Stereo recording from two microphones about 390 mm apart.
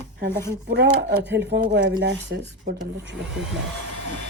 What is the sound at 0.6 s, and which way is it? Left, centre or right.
Speech, right.